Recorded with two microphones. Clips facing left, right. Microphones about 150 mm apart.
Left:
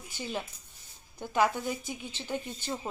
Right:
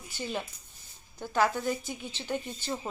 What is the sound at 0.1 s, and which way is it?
Speech, 10° left (ahead or behind).